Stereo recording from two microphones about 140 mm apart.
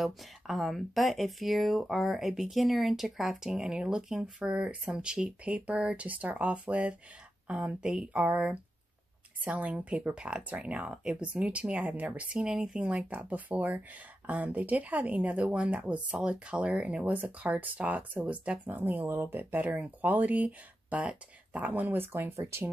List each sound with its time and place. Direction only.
0.0 s speech: centre (ahead or behind); by 22.7 s 20° right (ahead or behind)